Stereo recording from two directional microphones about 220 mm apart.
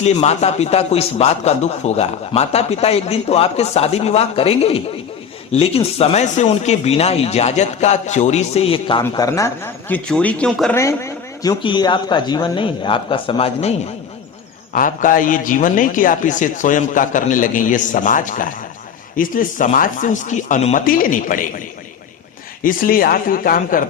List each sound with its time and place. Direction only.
0.0 s speech: 30° left (ahead or behind)
14.7 s a man's voice: 35° left (ahead or behind)
22.6 s a man's voice: 40° left (ahead or behind)